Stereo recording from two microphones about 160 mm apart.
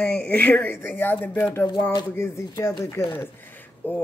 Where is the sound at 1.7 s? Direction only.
25° left (ahead or behind).